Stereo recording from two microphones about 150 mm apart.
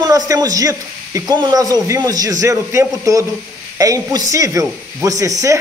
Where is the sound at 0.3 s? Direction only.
25° right (ahead or behind).